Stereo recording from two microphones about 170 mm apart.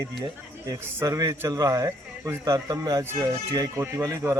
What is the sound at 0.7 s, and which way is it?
A man's voice, 20° right (ahead or behind).